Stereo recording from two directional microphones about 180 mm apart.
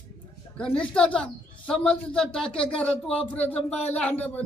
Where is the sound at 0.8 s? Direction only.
5° left (ahead or behind).